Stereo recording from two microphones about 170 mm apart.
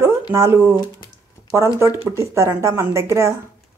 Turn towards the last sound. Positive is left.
turn(degrees=-15)  # may be behind; listen again after turning